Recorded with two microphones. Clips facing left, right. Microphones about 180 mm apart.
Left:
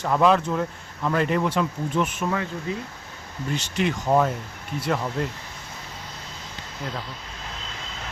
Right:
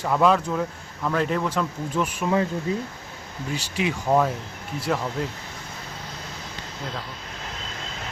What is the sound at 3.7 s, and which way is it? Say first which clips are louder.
A man's voice: even; 5° right (ahead or behind).